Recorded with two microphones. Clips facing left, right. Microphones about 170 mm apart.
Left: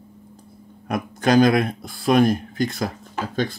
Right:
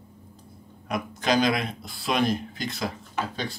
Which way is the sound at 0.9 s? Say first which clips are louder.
Left 6 dB; 50° left (ahead or behind).